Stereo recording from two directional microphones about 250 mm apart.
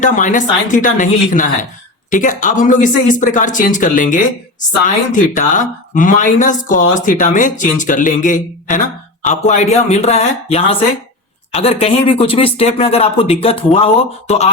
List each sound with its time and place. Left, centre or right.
0.0 s speech: left